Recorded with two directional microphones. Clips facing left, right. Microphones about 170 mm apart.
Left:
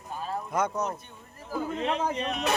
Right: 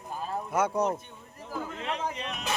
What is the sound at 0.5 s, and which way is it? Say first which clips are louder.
Speech: right 1 dB; 10° right (ahead or behind).